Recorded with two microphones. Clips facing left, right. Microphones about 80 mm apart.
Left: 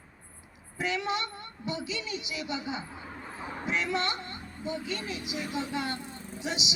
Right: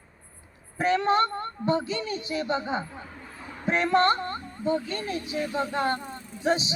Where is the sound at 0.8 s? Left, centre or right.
Right.